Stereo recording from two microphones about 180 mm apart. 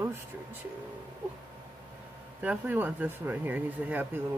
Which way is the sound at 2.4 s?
10° right (ahead or behind).